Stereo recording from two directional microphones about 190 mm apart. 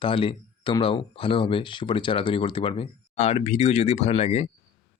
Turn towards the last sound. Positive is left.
turn(degrees=35)  # may be behind; listen again after turning